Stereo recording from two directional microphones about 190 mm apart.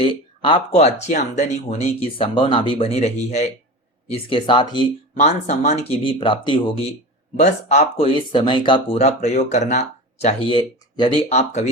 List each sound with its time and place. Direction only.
0.0 s speech: 25° left (ahead or behind)
5.2 s speech: 35° left (ahead or behind)
7.3 s speech: 35° left (ahead or behind)